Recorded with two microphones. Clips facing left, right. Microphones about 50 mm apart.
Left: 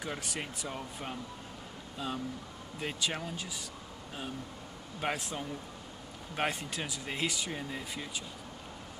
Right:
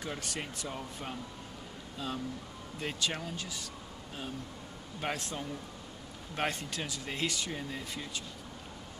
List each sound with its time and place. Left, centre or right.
0.0 s speech: centre
2.8 s speech: centre
5.0 s speech: centre